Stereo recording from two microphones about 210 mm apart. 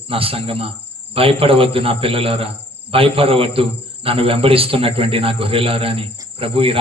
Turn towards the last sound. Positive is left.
turn(degrees=-25)  # may be behind; listen again after turning